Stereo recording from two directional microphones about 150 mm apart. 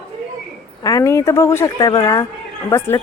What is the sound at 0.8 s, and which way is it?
A woman's voice, 20° left (ahead or behind).